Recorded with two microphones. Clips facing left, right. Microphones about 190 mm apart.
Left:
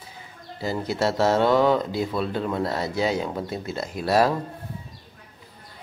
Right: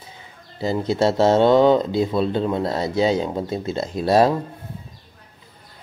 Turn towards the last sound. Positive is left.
turn(degrees=-25)  # may be behind; listen again after turning